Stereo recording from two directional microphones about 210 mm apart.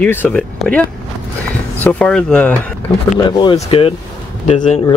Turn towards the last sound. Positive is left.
turn(degrees=35)  # may be behind; listen again after turning